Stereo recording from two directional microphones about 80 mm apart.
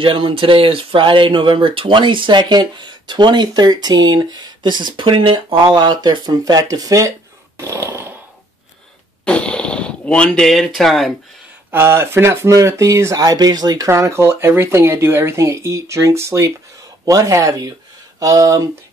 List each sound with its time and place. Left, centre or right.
0.0 s speech: right
5.8 s speech: right
7.6 s a sound: right
9.2 s fart: centre
10.5 s speech: centre
11.7 s speech: right
13.8 s speech: right